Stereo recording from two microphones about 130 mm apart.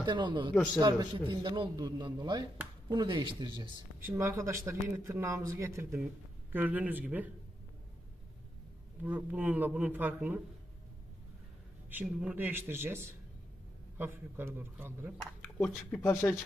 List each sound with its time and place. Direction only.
0.0 s a man's voice: 35° right (ahead or behind)
4.2 s speech: 20° right (ahead or behind)
9.0 s speech: 10° right (ahead or behind)
11.9 s speech: 10° right (ahead or behind)
15.4 s speech: 15° left (ahead or behind)